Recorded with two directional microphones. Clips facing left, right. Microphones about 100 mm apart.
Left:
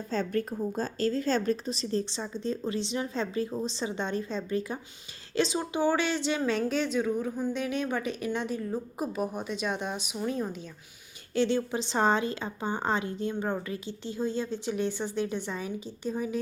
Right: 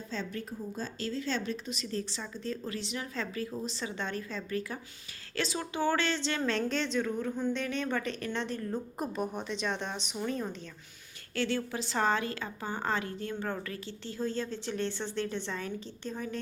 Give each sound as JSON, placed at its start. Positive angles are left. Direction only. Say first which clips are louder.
{"t": 0.1, "sound": "a woman's voice", "louder": "left 9 dB", "side_deg": 50}
{"t": 11.3, "sound": "a woman's voice", "louder": "left 5 dB", "side_deg": 20}